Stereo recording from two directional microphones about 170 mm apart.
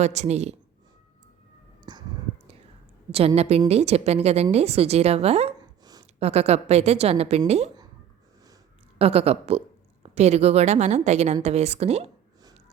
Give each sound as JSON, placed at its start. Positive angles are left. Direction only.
{"t": 0.0, "sound": "a woman's voice", "side_deg": -40}
{"t": 1.8, "sound": "a sound", "side_deg": -25}
{"t": 3.1, "sound": "a woman's voice", "side_deg": -35}
{"t": 5.8, "sound": "a sound", "side_deg": -20}
{"t": 6.1, "sound": "a woman's voice", "side_deg": -40}
{"t": 9.0, "sound": "a woman's voice", "side_deg": -35}